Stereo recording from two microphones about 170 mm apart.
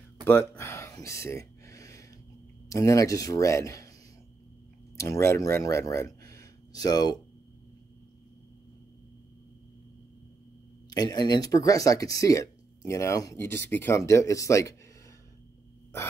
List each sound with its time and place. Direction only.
0.2 s a sound: 15° left (ahead or behind)
2.7 s speech: 20° left (ahead or behind)
4.9 s speech: 20° left (ahead or behind)
10.9 s speech: 25° left (ahead or behind)